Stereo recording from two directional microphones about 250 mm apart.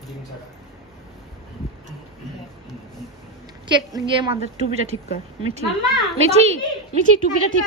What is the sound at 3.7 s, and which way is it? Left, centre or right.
Speech, centre.